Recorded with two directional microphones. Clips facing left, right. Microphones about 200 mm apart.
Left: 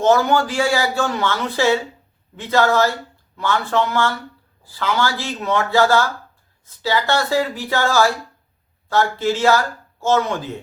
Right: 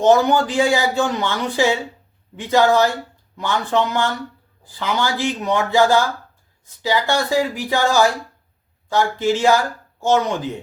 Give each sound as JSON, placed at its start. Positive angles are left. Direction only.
{"t": 0.0, "sound": "a man's voice", "side_deg": -15}